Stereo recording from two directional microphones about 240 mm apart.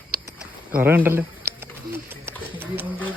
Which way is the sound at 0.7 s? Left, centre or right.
Centre.